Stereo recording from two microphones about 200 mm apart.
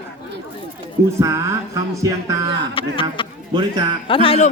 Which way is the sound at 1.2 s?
15° right (ahead or behind).